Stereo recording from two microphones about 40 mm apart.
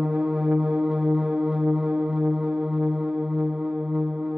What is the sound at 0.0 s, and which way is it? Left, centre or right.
Music, right.